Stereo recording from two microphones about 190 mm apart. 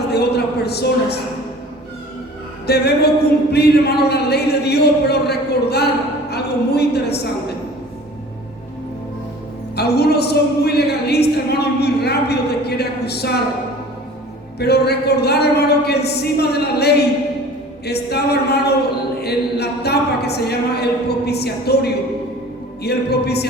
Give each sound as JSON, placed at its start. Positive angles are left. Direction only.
{"t": 0.1, "sound": "a man's voice", "side_deg": 60}
{"t": 2.6, "sound": "a woman's voice", "side_deg": 60}
{"t": 9.7, "sound": "a woman's voice", "side_deg": 60}
{"t": 14.6, "sound": "a woman's voice", "side_deg": 60}